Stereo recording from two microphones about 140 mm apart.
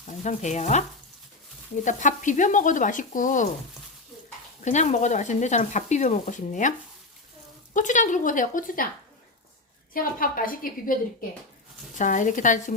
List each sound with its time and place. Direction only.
0.2 s speech: 60° left (ahead or behind)
4.6 s a woman's voice: 60° left (ahead or behind); by 8.9 s 80° left
9.9 s a woman's voice: 90° left
11.9 s speech: 65° left (ahead or behind)